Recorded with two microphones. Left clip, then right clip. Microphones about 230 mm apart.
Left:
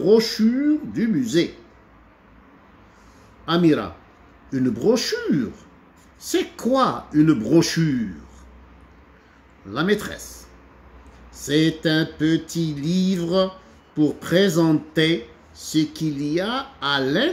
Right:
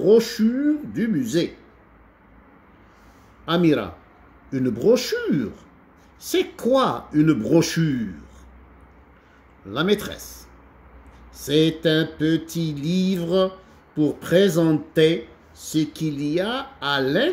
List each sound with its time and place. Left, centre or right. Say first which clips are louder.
0.0 s speech: even; centre
3.4 s speech: left 1 dB; centre
9.7 s speech: even; centre
11.3 s speech: right 1 dB; centre